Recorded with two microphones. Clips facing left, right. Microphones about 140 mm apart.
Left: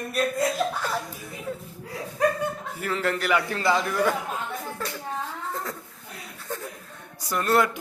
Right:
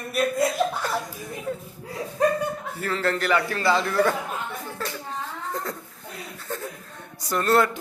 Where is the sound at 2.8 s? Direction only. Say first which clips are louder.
Right 1 dB; 15° left (ahead or behind).